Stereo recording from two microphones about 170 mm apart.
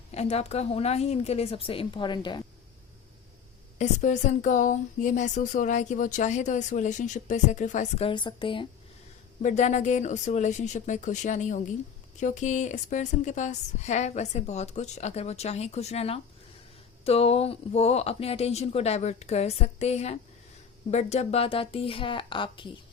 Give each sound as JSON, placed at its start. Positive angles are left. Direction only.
{"t": 0.1, "sound": "a woman's voice", "side_deg": 40}
{"t": 3.8, "sound": "a woman's voice", "side_deg": 45}
{"t": 9.4, "sound": "a woman's voice", "side_deg": 45}